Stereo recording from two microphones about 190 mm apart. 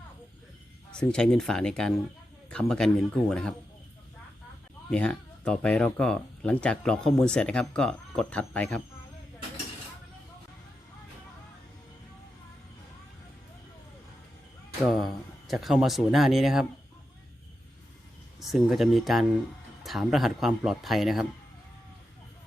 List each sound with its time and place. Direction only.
0.9 s speech: 5° left (ahead or behind)
4.9 s speech: 5° left (ahead or behind)
15.4 s speech: centre (ahead or behind)
18.3 s speech: centre (ahead or behind)